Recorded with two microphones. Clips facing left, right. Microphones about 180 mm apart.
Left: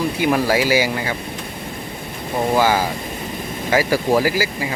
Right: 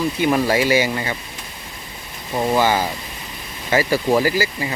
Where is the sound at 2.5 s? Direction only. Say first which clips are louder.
Left 1 dB; 10° left (ahead or behind).